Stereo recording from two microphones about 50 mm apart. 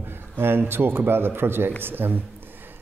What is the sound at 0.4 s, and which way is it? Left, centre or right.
A man's voice, right.